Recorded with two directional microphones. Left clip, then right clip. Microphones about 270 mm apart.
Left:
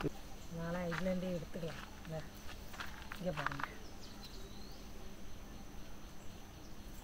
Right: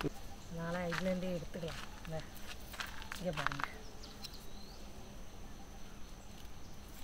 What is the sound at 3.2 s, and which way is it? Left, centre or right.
Speech, centre.